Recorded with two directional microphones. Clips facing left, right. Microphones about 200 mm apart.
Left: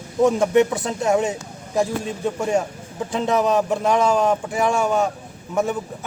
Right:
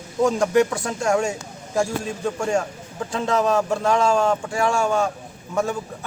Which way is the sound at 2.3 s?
20° left (ahead or behind).